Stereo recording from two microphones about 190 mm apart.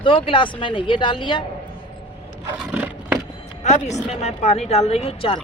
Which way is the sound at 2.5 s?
10° right (ahead or behind).